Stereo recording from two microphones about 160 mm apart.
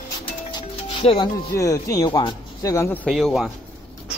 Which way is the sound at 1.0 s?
40° left (ahead or behind).